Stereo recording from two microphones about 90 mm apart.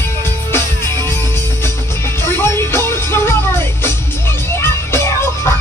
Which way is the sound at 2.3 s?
25° left (ahead or behind).